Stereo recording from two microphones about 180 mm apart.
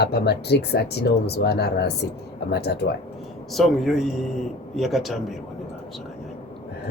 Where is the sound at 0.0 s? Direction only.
65° left (ahead or behind).